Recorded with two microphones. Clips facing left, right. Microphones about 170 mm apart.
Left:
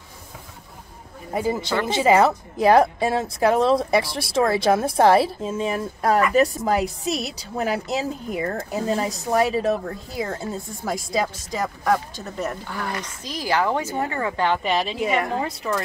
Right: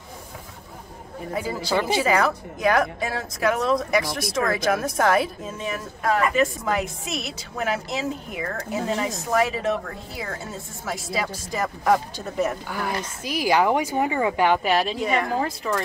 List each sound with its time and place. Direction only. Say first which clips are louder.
1.3 s a man's voice: left 2 dB; 20° left (ahead or behind)
11.8 s a woman's voice: right 2 dB; 5° right (ahead or behind)
14.6 s a woman's voice: right 1 dB; centre (ahead or behind)